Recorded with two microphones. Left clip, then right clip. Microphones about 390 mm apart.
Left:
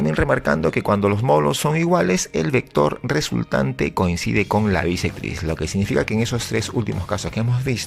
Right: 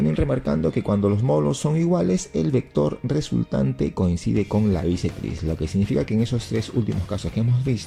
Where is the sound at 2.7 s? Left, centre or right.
Left.